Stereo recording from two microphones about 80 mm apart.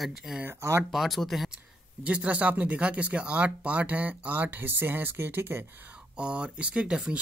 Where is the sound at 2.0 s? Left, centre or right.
Centre.